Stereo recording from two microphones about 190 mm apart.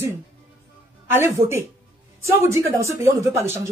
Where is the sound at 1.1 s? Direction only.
15° right (ahead or behind).